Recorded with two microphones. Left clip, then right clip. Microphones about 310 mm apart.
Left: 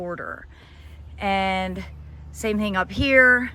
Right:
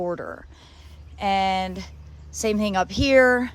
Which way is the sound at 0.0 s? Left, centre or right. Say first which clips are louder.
Right 2 dB; centre.